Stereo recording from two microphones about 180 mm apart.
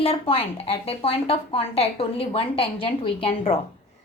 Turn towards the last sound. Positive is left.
turn(degrees=30)  # may be behind; listen again after turning